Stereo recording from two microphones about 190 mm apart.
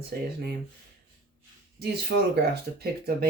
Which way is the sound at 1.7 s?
60° right (ahead or behind).